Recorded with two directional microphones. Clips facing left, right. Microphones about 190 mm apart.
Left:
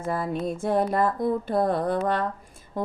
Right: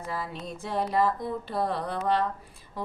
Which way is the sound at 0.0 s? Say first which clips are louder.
Left 8 dB; 50° left (ahead or behind).